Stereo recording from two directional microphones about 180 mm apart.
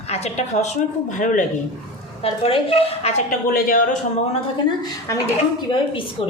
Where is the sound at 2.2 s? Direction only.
30° left (ahead or behind).